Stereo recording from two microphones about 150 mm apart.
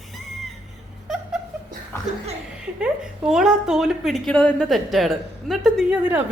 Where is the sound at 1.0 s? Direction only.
5° right (ahead or behind).